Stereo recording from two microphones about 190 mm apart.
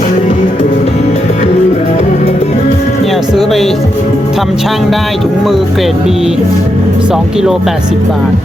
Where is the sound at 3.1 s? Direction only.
Centre (ahead or behind).